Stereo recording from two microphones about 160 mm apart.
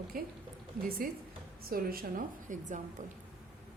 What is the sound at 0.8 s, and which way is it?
A woman's voice, 65° right (ahead or behind).